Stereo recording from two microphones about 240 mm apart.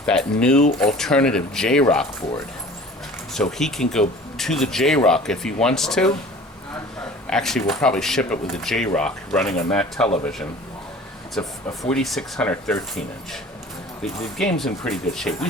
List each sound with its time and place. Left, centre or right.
0.0 s speech: centre
3.3 s speech: centre
7.3 s speech: centre
11.3 s speech: centre
14.3 s speech: centre